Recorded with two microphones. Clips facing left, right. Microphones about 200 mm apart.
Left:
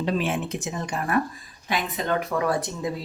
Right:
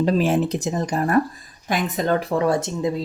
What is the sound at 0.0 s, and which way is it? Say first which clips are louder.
Speech: right 7 dB; 40° right (ahead or behind).